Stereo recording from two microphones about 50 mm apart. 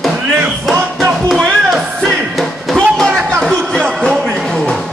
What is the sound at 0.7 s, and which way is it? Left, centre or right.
Music, centre.